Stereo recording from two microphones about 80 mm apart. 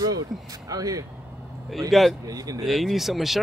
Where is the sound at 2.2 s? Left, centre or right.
Right.